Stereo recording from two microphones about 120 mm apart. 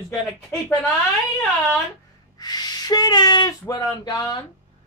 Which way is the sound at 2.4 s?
35° left (ahead or behind).